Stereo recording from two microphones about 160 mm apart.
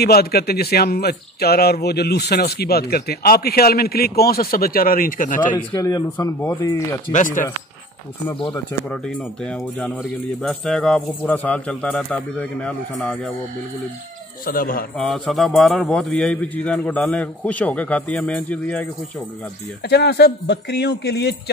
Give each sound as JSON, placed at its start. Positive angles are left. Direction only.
{"t": 0.0, "sound": "speech", "side_deg": 80}
{"t": 5.7, "sound": "speech", "side_deg": 25}
{"t": 7.1, "sound": "speech", "side_deg": 50}
{"t": 8.5, "sound": "speech", "side_deg": 5}
{"t": 14.4, "sound": "speech", "side_deg": 65}
{"t": 15.0, "sound": "a man's voice", "side_deg": 0}
{"t": 19.8, "sound": "speech", "side_deg": 90}